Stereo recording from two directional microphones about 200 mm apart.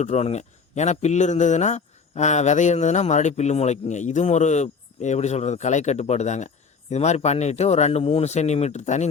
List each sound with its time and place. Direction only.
0.0 s a man's voice: 35° left (ahead or behind)